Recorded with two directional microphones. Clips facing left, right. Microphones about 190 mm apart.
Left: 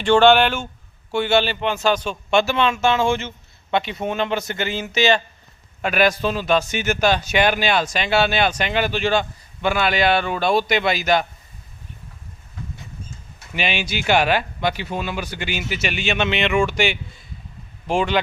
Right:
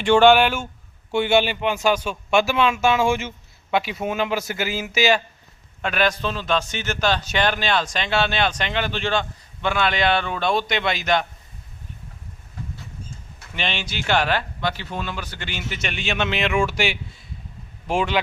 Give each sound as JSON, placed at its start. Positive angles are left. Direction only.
{"t": 0.0, "sound": "speech", "side_deg": -10}
{"t": 5.8, "sound": "a man's voice", "side_deg": 10}
{"t": 13.5, "sound": "a man's voice", "side_deg": 10}